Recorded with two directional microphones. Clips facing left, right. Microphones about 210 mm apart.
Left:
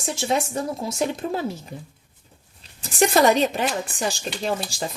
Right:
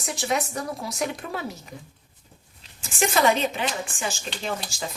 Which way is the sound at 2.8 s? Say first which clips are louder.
Left 4 dB; 40° left (ahead or behind).